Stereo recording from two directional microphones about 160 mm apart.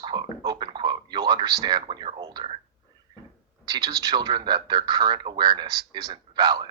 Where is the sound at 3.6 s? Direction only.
25° right (ahead or behind).